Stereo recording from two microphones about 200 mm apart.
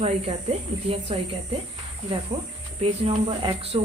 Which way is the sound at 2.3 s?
20° right (ahead or behind).